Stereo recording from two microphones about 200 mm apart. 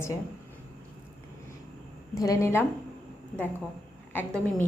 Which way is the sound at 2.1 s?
15° left (ahead or behind).